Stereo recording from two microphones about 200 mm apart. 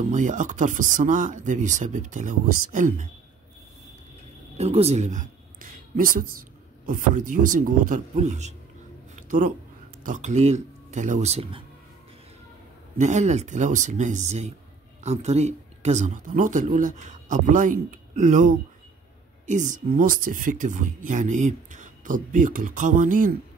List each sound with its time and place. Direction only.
0.1 s speech: 40° right (ahead or behind)
4.6 s speech: 30° right (ahead or behind)
9.1 s a sound: 40° right (ahead or behind)
10.0 s speech: 40° right (ahead or behind)
12.9 s speech: 35° right (ahead or behind)